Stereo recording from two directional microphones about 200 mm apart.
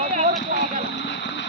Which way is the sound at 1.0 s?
65° left (ahead or behind).